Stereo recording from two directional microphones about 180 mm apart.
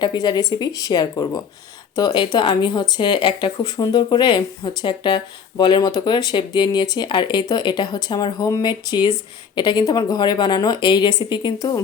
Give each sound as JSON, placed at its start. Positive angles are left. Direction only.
{"t": 0.0, "sound": "speech", "side_deg": 25}